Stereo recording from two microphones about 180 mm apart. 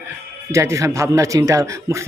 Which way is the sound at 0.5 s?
15° right (ahead or behind).